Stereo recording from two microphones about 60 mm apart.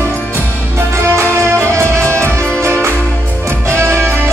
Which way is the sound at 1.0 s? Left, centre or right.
Right.